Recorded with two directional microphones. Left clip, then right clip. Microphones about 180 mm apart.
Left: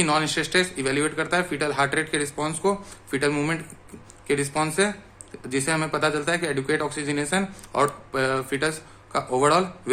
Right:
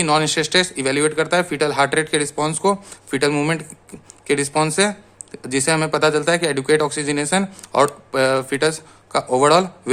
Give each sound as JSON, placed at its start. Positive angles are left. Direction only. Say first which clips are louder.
{"t": 0.0, "sound": "speech", "louder": "right 5 dB", "side_deg": -40}